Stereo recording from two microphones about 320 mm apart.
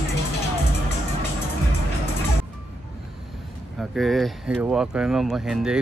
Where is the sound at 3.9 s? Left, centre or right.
Centre.